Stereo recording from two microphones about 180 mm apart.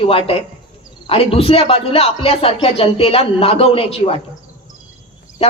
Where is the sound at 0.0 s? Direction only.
30° left (ahead or behind).